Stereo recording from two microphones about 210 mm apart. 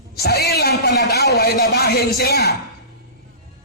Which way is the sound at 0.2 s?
50° left (ahead or behind).